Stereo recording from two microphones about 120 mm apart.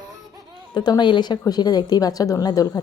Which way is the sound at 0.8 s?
35° left (ahead or behind).